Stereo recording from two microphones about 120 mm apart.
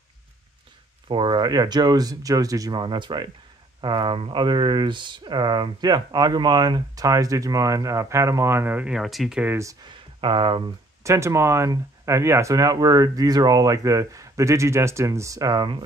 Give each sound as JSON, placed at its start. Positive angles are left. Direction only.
{"t": 1.0, "sound": "speech", "side_deg": -40}
{"t": 9.8, "sound": "speech", "side_deg": -40}
{"t": 11.1, "sound": "speech", "side_deg": -25}